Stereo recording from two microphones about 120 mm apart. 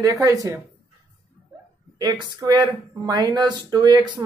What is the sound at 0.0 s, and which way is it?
Speech, 30° right (ahead or behind).